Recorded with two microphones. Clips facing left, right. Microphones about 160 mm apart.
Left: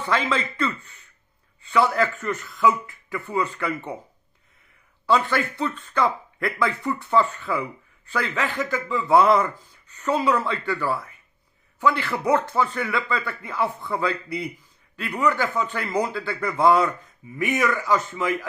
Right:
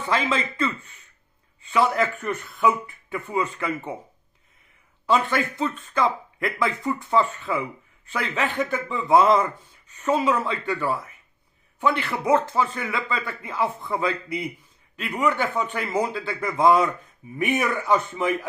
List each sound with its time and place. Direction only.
0.1 s speech: 20° right (ahead or behind)
5.0 s a man's voice: 20° right (ahead or behind)